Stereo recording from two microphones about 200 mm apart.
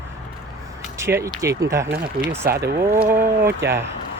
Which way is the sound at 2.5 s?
50° right (ahead or behind).